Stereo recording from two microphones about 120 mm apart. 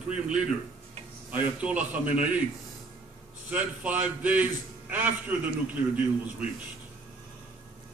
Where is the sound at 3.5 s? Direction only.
10° right (ahead or behind).